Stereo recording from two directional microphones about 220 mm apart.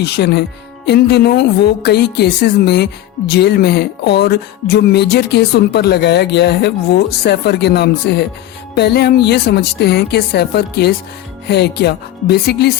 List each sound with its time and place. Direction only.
0.0 s speech: 50° left (ahead or behind)